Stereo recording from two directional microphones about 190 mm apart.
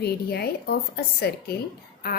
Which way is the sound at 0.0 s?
55° left (ahead or behind).